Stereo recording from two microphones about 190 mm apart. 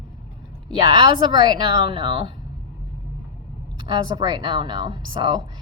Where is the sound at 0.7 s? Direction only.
25° right (ahead or behind).